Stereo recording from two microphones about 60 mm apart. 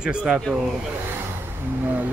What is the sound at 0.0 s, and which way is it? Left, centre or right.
Speech, centre.